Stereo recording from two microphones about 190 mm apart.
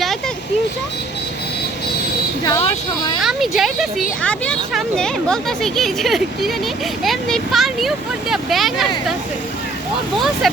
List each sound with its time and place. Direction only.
2.4 s speech: 30° left (ahead or behind)
3.2 s speech: centre (ahead or behind)
10.2 s speech: centre (ahead or behind)